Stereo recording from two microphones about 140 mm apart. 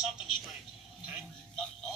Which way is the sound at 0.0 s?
Centre (ahead or behind).